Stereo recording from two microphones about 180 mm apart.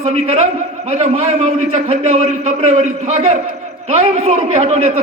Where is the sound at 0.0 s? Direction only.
35° right (ahead or behind).